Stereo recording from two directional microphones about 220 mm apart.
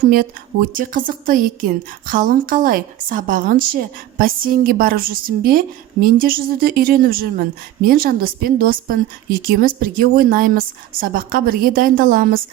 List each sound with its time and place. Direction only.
0.0 s a woman's voice: 40° right (ahead or behind)